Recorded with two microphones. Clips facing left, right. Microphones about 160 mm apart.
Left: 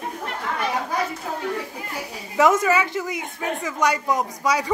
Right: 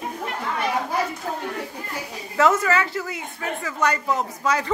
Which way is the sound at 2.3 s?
15° left (ahead or behind).